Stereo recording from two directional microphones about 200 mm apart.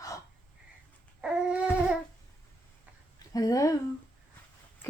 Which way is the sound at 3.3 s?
15° left (ahead or behind).